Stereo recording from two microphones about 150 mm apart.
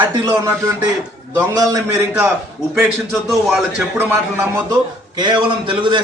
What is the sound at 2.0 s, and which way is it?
Speech, 15° right (ahead or behind).